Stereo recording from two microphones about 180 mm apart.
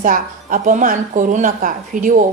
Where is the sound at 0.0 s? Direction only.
50° right (ahead or behind).